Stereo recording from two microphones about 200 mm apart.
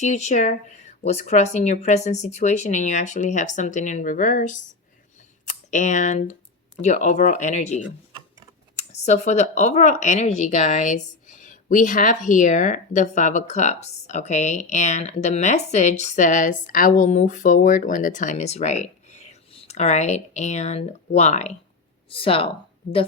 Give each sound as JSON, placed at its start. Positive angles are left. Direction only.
{"t": 0.0, "sound": "speech", "side_deg": 35}
{"t": 5.7, "sound": "speech", "side_deg": 40}